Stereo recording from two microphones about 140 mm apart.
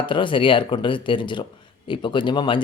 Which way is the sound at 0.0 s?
35° left (ahead or behind).